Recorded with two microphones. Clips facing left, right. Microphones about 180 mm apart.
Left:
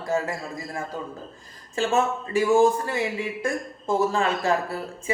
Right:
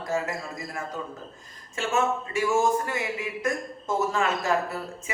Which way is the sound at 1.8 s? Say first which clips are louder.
Left 3 dB; 35° left (ahead or behind).